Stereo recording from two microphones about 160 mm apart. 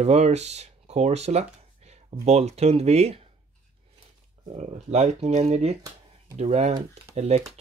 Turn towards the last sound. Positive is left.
turn(degrees=-45)  # may be behind; listen again after turning